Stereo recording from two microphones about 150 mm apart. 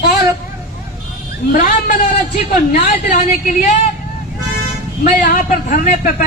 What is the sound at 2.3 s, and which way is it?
A woman's voice, 60° left (ahead or behind).